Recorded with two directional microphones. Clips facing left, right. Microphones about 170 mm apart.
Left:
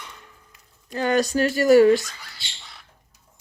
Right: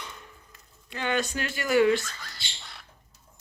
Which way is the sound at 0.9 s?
40° left (ahead or behind).